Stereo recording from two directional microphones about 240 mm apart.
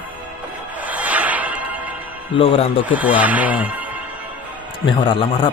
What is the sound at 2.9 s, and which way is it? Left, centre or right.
Speech, centre.